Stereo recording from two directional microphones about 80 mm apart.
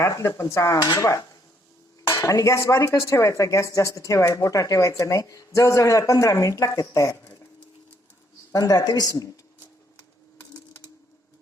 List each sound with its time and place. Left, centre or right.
0.0 s speech: left
8.5 s speech: left